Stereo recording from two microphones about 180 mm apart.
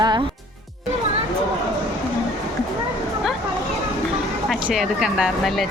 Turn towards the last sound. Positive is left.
turn(degrees=0)  # may be behind; listen again after turning